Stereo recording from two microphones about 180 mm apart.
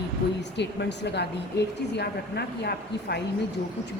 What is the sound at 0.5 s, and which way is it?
Speech, 70° left (ahead or behind).